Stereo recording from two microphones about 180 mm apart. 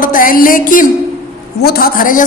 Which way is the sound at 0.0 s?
50° left (ahead or behind).